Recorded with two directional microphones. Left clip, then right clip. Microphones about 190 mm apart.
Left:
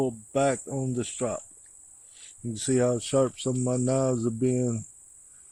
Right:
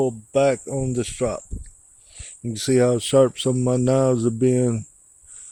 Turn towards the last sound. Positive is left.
turn(degrees=-40)  # may be behind; listen again after turning